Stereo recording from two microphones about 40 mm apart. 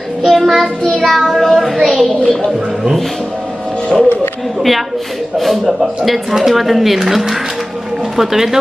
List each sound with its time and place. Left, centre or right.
0.3 s child singing: centre
0.9 s a child's voice: centre
3.9 s speech: centre
5.4 s speech: centre
8.2 s speech: centre